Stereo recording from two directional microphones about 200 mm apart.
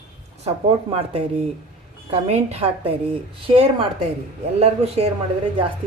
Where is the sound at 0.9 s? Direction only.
30° right (ahead or behind).